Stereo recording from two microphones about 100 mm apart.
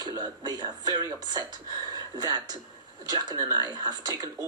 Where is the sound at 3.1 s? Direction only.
45° right (ahead or behind).